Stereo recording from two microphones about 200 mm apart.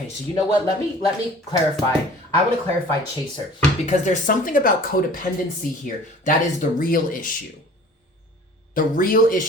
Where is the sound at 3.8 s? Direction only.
35° left (ahead or behind).